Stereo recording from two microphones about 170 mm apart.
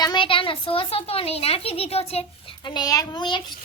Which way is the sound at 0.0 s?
25° left (ahead or behind).